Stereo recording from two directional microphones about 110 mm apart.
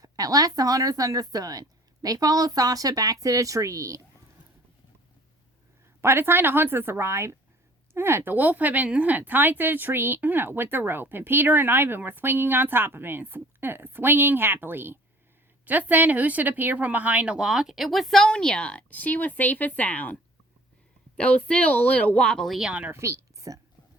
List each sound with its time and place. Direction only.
0.0 s a woman's voice: 35° right (ahead or behind)
6.0 s speech: 20° right (ahead or behind); by 20.1 s 15° left (ahead or behind)
21.2 s speech: 10° left (ahead or behind); by 22.9 s 10° right (ahead or behind)
22.9 s a woman's voice: 25° right (ahead or behind)